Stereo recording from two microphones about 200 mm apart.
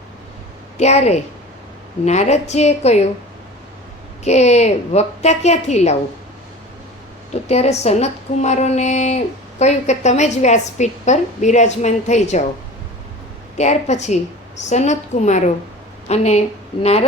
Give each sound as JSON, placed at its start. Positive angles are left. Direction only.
{"t": 0.8, "sound": "speech", "side_deg": 35}
{"t": 4.2, "sound": "speech", "side_deg": 35}
{"t": 7.4, "sound": "speech", "side_deg": 30}
{"t": 13.6, "sound": "speech", "side_deg": 35}